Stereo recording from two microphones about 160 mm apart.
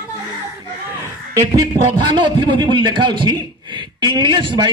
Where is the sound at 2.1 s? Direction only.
30° right (ahead or behind).